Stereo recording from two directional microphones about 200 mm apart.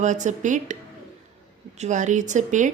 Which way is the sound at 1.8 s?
35° right (ahead or behind).